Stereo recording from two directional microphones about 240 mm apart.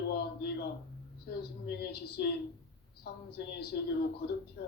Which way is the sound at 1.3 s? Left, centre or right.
Left.